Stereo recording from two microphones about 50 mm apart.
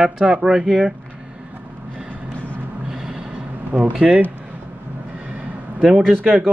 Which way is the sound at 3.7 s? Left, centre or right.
Right.